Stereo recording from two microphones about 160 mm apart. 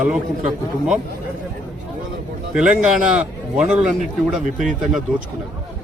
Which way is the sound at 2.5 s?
10° right (ahead or behind).